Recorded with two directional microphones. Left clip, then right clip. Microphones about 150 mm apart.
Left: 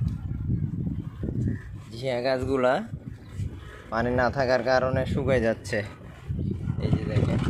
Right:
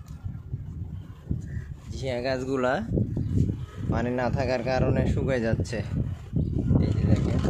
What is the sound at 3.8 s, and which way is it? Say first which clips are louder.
Speech: left 3 dB; 15° right (ahead or behind).